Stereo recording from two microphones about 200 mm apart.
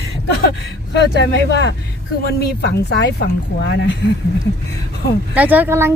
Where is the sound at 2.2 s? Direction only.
55° left (ahead or behind).